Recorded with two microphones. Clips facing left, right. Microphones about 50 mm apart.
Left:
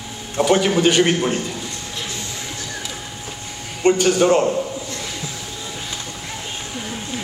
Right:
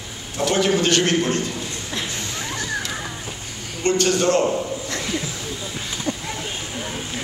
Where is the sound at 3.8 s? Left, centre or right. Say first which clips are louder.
Left 4 dB; centre.